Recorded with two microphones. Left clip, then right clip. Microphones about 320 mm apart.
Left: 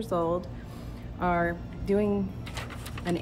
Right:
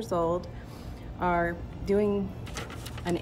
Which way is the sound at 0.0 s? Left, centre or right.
Centre.